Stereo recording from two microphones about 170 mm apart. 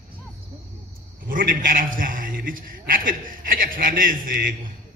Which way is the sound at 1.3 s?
55° right (ahead or behind).